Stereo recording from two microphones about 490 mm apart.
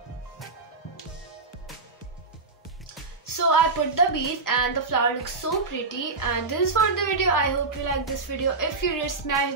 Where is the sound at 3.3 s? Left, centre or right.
Left.